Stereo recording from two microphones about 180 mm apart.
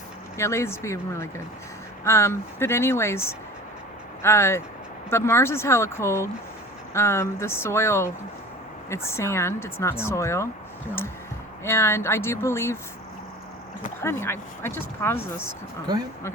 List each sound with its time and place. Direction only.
0.3 s a woman's voice: 15° left (ahead or behind)
11.6 s a woman's voice: 15° left (ahead or behind)
14.0 s a woman's voice: 15° left (ahead or behind)